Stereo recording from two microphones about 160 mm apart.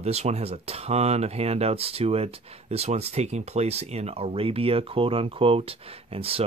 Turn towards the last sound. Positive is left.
turn(degrees=-35)  # may be behind; listen again after turning